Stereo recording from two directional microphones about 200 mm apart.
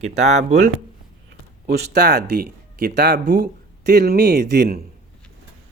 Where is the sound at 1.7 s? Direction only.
55° right (ahead or behind).